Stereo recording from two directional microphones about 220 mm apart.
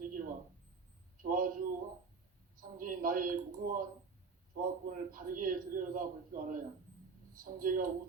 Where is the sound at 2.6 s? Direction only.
40° right (ahead or behind).